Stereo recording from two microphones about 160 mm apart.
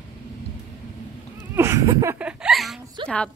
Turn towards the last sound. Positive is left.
turn(degrees=5)  # may be behind; listen again after turning